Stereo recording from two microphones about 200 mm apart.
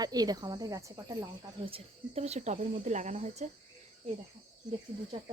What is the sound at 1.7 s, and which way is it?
Speech, 30° right (ahead or behind).